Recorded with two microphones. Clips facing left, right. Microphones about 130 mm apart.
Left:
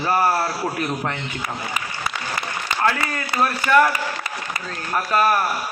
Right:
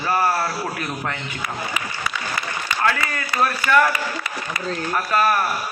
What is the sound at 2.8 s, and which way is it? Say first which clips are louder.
A man's voice: left 1 dB; 15° left (ahead or behind).